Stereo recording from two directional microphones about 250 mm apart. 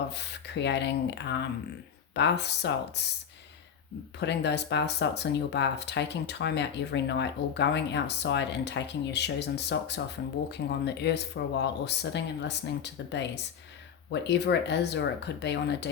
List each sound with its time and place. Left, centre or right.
0.1 s speech: left
4.2 s speech: left